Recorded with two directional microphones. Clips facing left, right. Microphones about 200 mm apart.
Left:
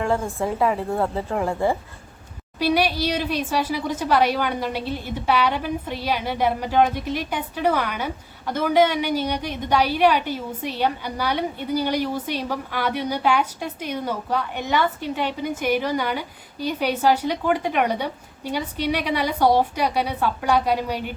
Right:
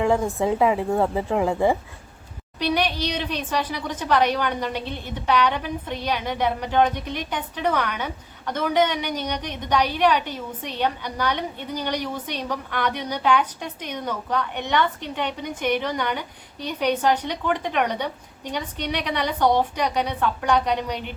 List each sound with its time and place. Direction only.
0.3 s speech: 15° right (ahead or behind)
2.6 s speech: 5° left (ahead or behind)